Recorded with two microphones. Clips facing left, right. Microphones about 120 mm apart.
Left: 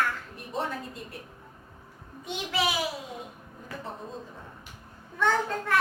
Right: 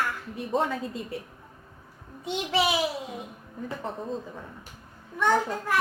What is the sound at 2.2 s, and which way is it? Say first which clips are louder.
Speech: right 4 dB; 25° right (ahead or behind).